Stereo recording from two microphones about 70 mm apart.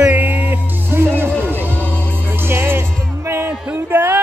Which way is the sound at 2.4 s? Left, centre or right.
Right.